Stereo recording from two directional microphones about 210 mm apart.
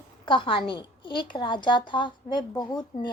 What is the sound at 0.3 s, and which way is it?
A woman's voice, 25° left (ahead or behind).